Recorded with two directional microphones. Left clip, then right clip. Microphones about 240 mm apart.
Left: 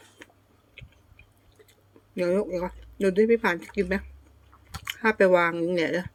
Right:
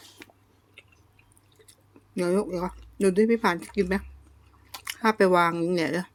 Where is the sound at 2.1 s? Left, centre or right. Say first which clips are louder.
Left 1 dB; centre.